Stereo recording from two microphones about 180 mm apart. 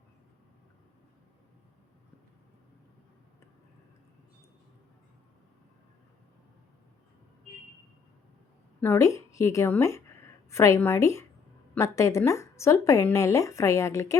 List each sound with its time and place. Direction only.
8.8 s speech: 15° left (ahead or behind)